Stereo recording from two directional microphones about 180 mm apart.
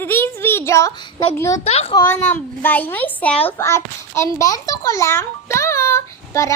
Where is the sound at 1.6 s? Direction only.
35° left (ahead or behind).